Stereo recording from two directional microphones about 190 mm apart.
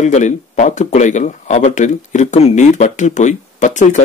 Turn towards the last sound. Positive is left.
turn(degrees=40)  # may be behind; listen again after turning